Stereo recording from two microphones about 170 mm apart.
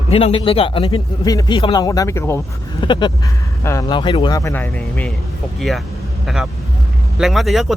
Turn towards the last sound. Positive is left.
turn(degrees=0)  # may be behind; listen again after turning